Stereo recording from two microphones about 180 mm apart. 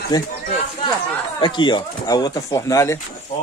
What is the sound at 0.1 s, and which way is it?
Speech, 20° left (ahead or behind).